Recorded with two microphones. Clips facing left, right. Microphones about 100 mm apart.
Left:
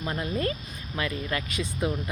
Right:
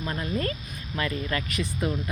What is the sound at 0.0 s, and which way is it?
Speech, 20° left (ahead or behind).